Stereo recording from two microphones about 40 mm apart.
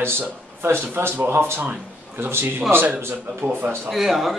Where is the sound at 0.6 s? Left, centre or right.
Right.